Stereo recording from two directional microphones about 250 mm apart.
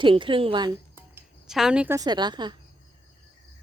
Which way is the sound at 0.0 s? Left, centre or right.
Centre.